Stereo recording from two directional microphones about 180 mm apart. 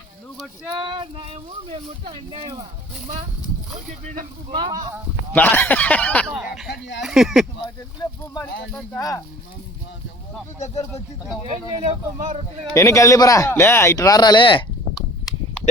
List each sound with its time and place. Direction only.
0.8 s speech: 25° right (ahead or behind)
4.0 s speech: 50° right (ahead or behind)
4.5 s speech: 25° right (ahead or behind)
5.3 s a man's voice: 10° left (ahead or behind)
6.2 s speech: 5° right (ahead or behind)
6.7 s speech: 70° left (ahead or behind)
7.0 s speech: centre (ahead or behind)
8.0 s speech: 20° left (ahead or behind)
11.8 s speech: 40° right (ahead or behind)
12.7 s a man's voice: 15° left (ahead or behind)